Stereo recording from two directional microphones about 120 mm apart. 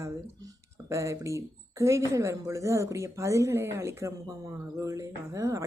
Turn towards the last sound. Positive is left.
turn(degrees=-25)  # may be behind; listen again after turning